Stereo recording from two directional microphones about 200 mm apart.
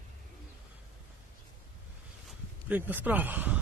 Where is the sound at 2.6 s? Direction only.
10° right (ahead or behind).